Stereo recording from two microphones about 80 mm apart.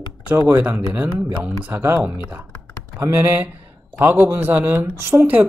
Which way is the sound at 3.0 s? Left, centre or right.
Right.